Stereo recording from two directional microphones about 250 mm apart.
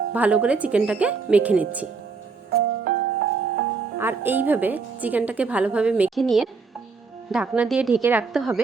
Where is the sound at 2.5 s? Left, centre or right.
Right.